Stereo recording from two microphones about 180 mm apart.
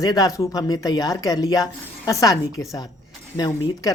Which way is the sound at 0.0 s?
20° left (ahead or behind).